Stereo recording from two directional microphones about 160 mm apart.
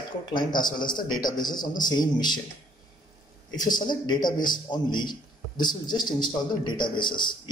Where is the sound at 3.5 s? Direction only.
25° left (ahead or behind).